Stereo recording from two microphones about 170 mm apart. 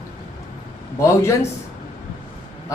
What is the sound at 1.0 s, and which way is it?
Speech, 15° left (ahead or behind).